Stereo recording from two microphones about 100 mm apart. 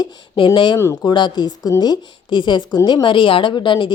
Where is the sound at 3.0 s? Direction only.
55° left (ahead or behind).